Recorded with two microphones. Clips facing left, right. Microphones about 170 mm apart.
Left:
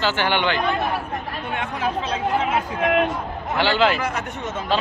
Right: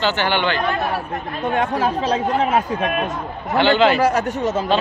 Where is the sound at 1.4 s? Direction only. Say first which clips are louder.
Right 8 dB; 40° right (ahead or behind).